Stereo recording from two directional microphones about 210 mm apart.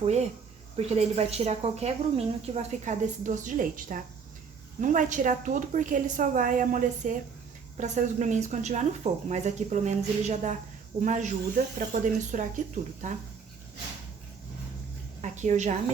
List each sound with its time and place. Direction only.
0.0 s speech: 30° right (ahead or behind)
15.2 s speech: 35° right (ahead or behind)